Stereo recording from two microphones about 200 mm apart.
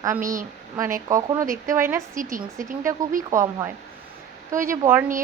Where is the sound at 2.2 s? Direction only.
40° right (ahead or behind).